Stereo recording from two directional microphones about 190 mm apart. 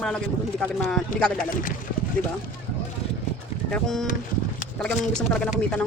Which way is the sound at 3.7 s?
Centre (ahead or behind).